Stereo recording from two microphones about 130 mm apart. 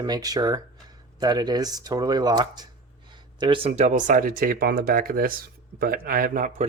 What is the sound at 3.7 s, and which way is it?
Speech, 70° right (ahead or behind).